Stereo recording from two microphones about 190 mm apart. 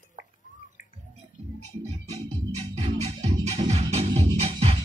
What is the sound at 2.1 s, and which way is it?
Music, 35° right (ahead or behind).